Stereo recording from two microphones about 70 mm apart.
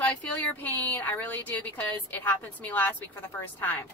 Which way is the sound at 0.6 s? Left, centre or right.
Left.